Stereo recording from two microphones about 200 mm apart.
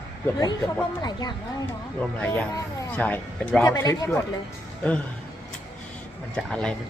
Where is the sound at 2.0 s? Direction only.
5° left (ahead or behind).